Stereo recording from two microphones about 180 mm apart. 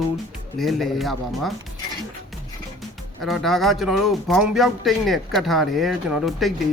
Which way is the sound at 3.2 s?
Centre (ahead or behind).